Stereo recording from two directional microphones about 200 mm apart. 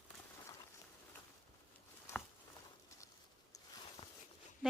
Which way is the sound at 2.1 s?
15° left (ahead or behind).